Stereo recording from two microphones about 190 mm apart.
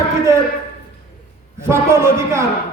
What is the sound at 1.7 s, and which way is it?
Speech, 15° right (ahead or behind).